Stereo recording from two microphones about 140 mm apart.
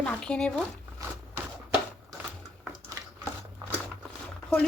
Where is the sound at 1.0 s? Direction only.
25° right (ahead or behind).